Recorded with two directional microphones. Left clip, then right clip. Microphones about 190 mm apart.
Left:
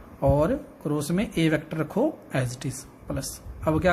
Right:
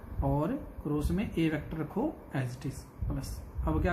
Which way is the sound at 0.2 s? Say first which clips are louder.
Left 10 dB; 50° left (ahead or behind).